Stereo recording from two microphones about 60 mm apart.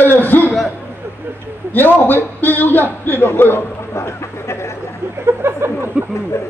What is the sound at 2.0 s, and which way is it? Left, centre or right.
A man's voice, left.